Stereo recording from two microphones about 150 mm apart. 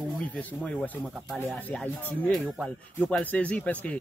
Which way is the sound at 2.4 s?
5° right (ahead or behind).